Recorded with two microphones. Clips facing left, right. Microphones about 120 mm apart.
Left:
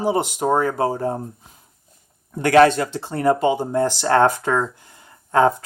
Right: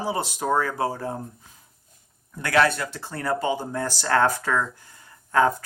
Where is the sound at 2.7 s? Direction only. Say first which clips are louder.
Left 8 dB; 25° left (ahead or behind).